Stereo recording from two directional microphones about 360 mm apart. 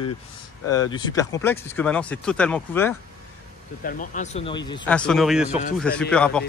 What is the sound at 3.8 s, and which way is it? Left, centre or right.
Speech, centre.